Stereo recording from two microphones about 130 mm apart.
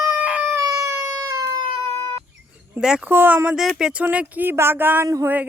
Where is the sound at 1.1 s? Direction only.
30° right (ahead or behind).